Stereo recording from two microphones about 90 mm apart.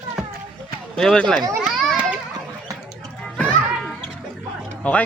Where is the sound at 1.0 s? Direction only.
5° left (ahead or behind).